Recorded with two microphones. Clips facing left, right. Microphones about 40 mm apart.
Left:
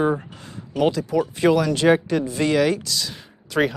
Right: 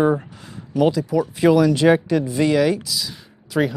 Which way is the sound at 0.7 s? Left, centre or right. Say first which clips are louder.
Right 2 dB; left.